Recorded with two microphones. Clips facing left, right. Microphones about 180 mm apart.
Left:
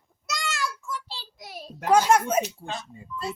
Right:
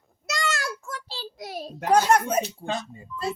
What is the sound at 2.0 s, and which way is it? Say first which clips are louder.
Speech: even; 5° left (ahead or behind).